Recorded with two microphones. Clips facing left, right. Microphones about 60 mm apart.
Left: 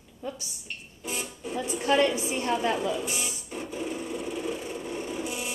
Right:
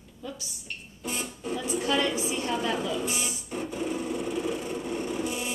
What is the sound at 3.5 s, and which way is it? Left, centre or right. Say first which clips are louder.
Wood: right 3 dB; centre.